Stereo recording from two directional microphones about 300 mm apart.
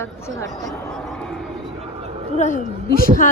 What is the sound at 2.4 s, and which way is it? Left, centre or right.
Speech, left.